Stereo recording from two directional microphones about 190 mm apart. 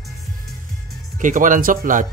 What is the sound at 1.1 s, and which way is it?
Speech, 45° right (ahead or behind).